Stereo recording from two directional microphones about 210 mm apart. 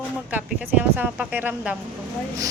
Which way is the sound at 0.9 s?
5° right (ahead or behind).